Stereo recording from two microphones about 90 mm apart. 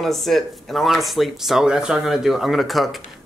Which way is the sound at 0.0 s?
Centre (ahead or behind).